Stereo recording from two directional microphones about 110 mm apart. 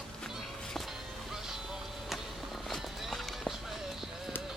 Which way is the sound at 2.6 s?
Centre (ahead or behind).